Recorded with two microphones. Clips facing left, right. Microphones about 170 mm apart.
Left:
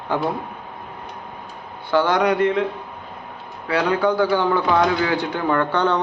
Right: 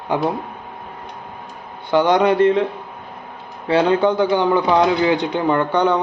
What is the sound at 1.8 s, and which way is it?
Speech, 20° right (ahead or behind).